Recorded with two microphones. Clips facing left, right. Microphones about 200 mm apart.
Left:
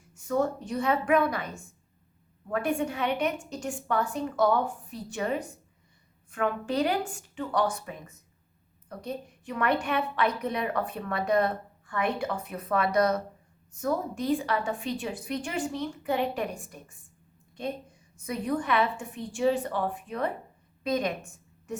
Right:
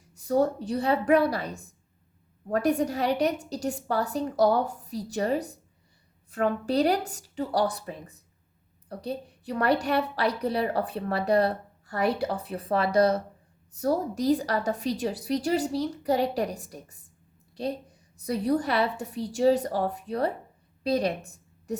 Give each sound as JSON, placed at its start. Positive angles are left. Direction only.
{"t": 0.1, "sound": "a woman's voice", "side_deg": -35}
{"t": 18.2, "sound": "a woman's voice", "side_deg": -35}